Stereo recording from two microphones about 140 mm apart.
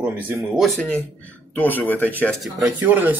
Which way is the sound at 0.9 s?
10° left (ahead or behind).